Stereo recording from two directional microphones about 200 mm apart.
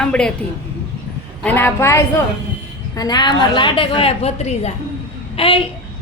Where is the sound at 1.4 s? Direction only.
10° left (ahead or behind).